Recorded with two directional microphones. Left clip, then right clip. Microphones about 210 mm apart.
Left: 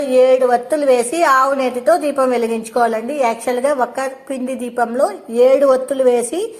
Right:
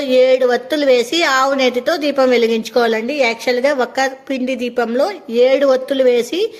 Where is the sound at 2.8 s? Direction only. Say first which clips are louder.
Even; 40° right (ahead or behind).